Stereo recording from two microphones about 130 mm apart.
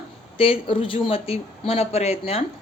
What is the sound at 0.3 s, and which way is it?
Speech, 45° left (ahead or behind).